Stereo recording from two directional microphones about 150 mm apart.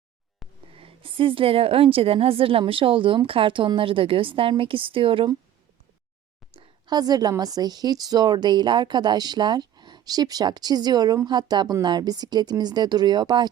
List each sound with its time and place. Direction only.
0.7 s a woman's voice: 40° right (ahead or behind)
6.5 s a woman's voice: 35° right (ahead or behind)